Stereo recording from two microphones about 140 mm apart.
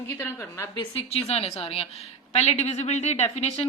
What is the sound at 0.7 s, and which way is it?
A woman's voice, 45° left (ahead or behind).